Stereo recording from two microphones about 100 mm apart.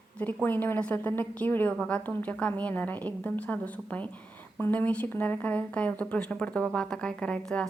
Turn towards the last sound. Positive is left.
turn(degrees=10)  # may be behind; listen again after turning